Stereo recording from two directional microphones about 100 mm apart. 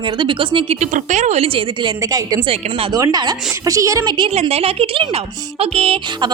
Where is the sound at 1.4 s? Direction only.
65° right (ahead or behind).